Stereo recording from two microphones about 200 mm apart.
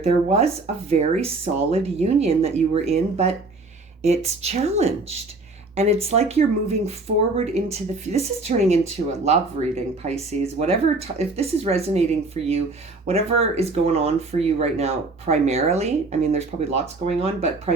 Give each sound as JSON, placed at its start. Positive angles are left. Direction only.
{"t": 0.0, "sound": "speech", "side_deg": -30}